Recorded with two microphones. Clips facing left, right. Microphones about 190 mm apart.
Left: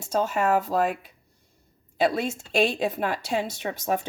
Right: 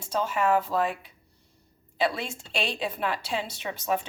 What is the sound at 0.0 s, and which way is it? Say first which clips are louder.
Speech: left 2 dB; 45° left (ahead or behind).